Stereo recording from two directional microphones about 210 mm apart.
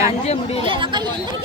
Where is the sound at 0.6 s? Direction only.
25° right (ahead or behind).